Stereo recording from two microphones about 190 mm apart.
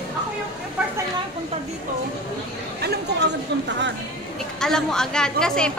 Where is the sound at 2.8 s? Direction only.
60° right (ahead or behind).